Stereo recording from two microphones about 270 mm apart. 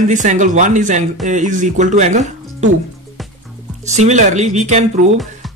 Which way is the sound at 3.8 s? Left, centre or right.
Right.